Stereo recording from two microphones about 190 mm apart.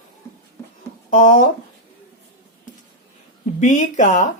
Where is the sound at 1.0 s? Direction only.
40° left (ahead or behind).